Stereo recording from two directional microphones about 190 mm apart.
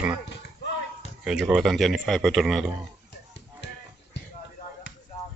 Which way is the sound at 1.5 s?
Centre (ahead or behind).